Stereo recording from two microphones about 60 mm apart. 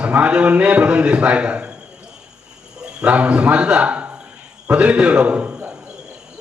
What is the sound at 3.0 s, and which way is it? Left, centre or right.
A man's voice, right.